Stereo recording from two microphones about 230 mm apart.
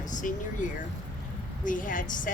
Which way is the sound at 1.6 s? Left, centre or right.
Left.